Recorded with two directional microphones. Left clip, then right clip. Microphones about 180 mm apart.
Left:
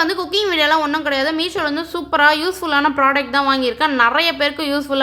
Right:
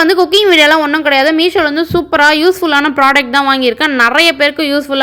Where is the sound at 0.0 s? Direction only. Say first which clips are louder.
Right 9 dB; 25° right (ahead or behind).